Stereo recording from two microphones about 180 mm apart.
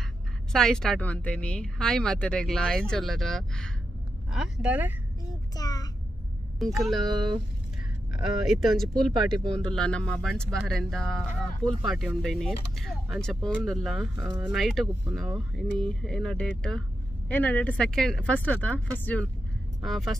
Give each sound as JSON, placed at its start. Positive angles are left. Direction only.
{"t": 0.5, "sound": "speech", "side_deg": 0}
{"t": 5.2, "sound": "child singing", "side_deg": 20}
{"t": 6.6, "sound": "speech", "side_deg": 0}
{"t": 8.2, "sound": "speech", "side_deg": 0}